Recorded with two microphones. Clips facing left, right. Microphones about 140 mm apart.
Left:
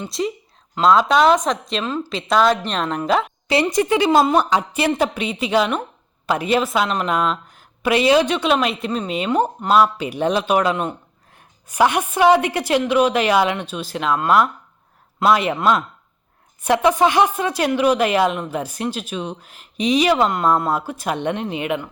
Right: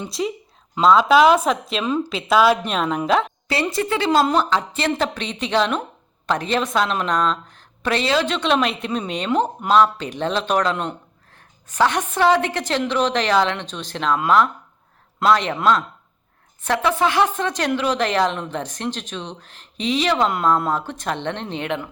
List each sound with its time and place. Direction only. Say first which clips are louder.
0.0 s a woman's voice: left 1 dB; centre (ahead or behind)
3.5 s a woman's voice: left 5 dB; 15° left (ahead or behind)